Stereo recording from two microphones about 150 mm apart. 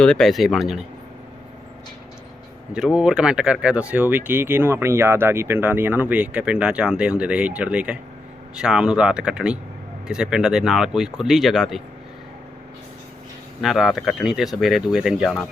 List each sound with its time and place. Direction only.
0.0 s speech: 5° left (ahead or behind)
2.7 s speech: 5° right (ahead or behind)
13.6 s speech: centre (ahead or behind)